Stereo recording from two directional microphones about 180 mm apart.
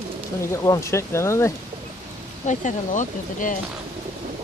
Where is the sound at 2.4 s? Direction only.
45° left (ahead or behind).